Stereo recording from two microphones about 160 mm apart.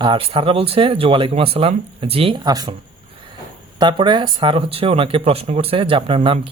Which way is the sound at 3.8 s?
30° right (ahead or behind).